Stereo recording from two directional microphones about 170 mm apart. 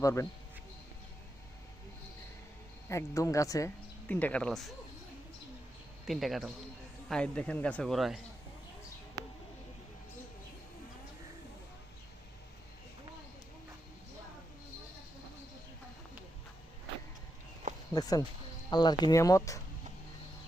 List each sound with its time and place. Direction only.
0.0 s speech: 15° left (ahead or behind)
2.9 s speech: 20° left (ahead or behind)
4.1 s speech: 10° left (ahead or behind)
6.1 s a man's voice: centre (ahead or behind)
17.9 s speech: 20° left (ahead or behind)